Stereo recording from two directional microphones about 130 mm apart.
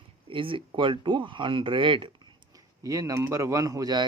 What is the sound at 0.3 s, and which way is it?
Speech, 40° right (ahead or behind).